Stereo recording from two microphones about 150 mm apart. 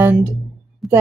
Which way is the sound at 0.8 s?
Centre (ahead or behind).